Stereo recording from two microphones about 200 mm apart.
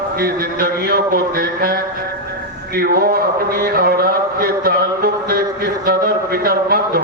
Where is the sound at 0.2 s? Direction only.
50° right (ahead or behind).